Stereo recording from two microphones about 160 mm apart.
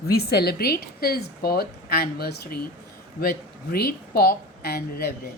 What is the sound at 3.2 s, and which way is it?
A woman's voice, 70° left (ahead or behind).